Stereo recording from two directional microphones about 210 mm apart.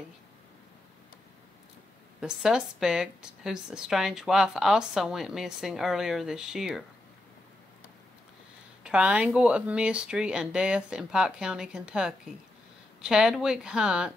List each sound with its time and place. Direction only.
2.1 s speech: 5° right (ahead or behind)
8.8 s speech: 5° right (ahead or behind)